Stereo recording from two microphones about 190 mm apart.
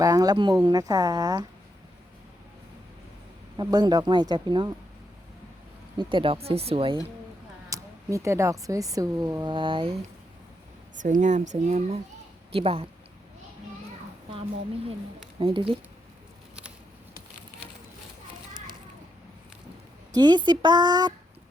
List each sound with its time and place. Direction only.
0.0 s speech: 20° right (ahead or behind)
3.6 s speech: 20° right (ahead or behind)
6.0 s speech: 25° right (ahead or behind)
7.7 s speech: 15° right (ahead or behind)
11.0 s a woman's voice: 40° right (ahead or behind)
15.4 s speech: 30° right (ahead or behind)
20.1 s speech: 25° right (ahead or behind)